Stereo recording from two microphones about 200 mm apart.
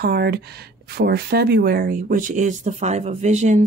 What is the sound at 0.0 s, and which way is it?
Speech, 55° right (ahead or behind).